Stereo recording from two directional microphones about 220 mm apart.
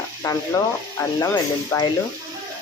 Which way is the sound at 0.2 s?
15° left (ahead or behind).